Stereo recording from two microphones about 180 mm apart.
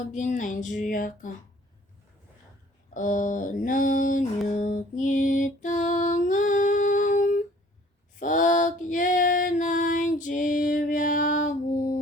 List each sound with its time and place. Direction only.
0.1 s speech: 45° left (ahead or behind)
2.9 s mantra: 45° left (ahead or behind)
8.2 s female singing: 45° left (ahead or behind)